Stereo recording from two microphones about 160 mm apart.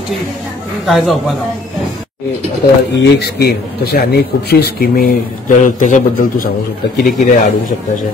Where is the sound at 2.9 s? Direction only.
90° left; by 6.5 s 55° left (ahead or behind).